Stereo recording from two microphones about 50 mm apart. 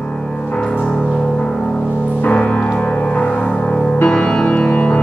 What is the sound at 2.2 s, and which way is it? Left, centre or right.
Music, left.